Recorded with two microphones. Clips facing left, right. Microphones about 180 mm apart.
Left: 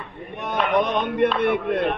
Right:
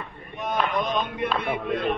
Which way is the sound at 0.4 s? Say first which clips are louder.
Left 4 dB; 70° left (ahead or behind).